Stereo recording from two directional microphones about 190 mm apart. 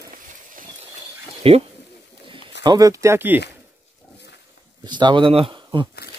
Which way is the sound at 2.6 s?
20° right (ahead or behind).